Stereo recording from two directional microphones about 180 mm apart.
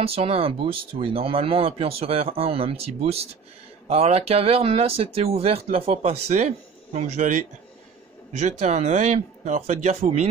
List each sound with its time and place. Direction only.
0.0 s speech: 35° right (ahead or behind)